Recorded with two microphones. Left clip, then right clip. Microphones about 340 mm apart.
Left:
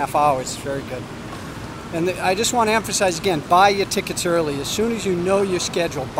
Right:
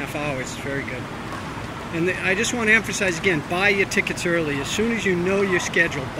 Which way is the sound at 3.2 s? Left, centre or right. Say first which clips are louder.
Left 6 dB; left.